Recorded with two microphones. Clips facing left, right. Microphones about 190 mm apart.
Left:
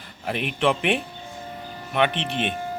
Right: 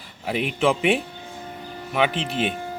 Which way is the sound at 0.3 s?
5° right (ahead or behind).